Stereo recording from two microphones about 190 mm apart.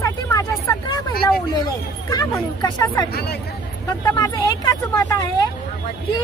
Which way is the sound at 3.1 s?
55° left (ahead or behind).